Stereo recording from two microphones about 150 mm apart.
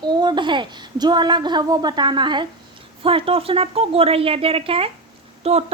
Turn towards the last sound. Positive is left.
turn(degrees=-40)  # may be behind; listen again after turning